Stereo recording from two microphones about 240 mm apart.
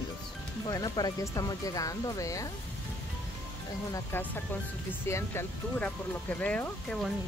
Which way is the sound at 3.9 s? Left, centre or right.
Centre.